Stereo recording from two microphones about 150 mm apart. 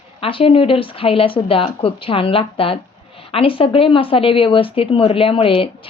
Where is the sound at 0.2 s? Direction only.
40° left (ahead or behind).